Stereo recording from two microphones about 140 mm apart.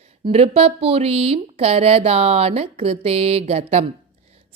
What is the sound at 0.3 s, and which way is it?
A woman's voice, 45° right (ahead or behind).